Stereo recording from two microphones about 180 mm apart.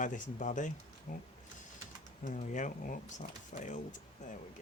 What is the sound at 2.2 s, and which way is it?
Speech, 45° left (ahead or behind).